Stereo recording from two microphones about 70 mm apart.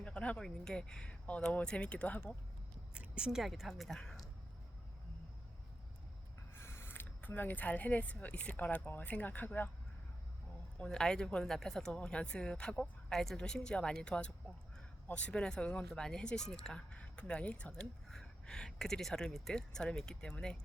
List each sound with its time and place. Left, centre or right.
0.0 s speech: centre
2.9 s speech: centre
6.5 s speech: left
10.8 s speech: centre